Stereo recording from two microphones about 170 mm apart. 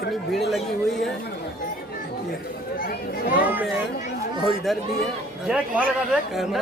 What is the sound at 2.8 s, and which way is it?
Speech, 55° left (ahead or behind).